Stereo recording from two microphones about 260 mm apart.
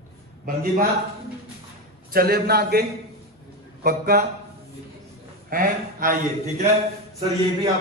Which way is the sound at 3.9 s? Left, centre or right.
Right.